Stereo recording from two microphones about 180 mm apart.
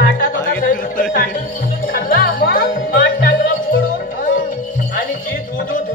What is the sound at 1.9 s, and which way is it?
Music, 50° left (ahead or behind).